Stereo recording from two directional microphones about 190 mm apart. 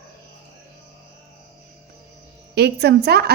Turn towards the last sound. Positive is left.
turn(degrees=-60)  # may be behind; listen again after turning